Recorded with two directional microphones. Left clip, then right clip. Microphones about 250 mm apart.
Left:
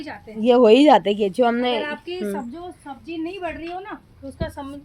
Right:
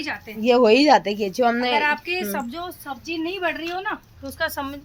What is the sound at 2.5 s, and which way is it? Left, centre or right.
A woman's voice, centre.